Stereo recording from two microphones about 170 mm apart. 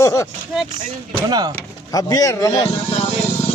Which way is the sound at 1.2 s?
25° right (ahead or behind).